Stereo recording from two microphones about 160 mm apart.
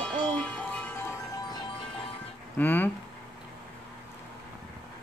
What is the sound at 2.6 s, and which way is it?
Speech, 10° left (ahead or behind).